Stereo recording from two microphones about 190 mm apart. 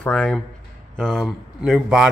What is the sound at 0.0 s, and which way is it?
Speech, 5° left (ahead or behind).